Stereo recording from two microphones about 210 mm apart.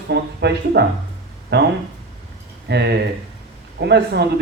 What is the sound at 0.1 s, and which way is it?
A man's voice, 50° right (ahead or behind).